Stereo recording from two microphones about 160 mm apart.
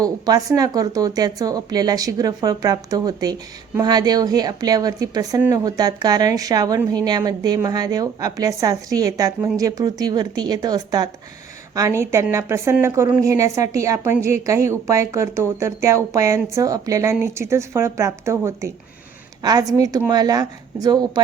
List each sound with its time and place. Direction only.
0.0 s a woman's voice: 25° right (ahead or behind)